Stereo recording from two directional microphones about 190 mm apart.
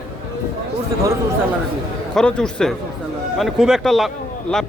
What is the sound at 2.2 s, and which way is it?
A man's voice, 5° left (ahead or behind).